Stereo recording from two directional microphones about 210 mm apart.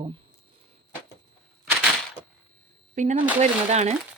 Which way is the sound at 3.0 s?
35° right (ahead or behind).